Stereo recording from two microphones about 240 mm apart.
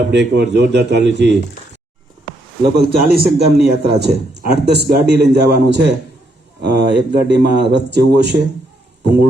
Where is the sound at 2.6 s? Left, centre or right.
Right.